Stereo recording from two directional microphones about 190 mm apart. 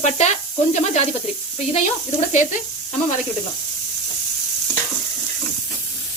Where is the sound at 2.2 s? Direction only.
40° left (ahead or behind).